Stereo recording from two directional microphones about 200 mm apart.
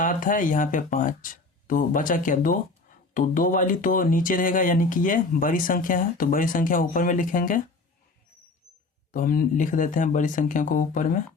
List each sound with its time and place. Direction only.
0.0 s speech: 40° left (ahead or behind)
9.1 s speech: 45° left (ahead or behind)